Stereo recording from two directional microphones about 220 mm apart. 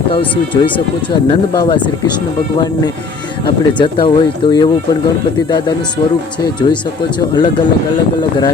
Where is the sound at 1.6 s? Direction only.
20° left (ahead or behind).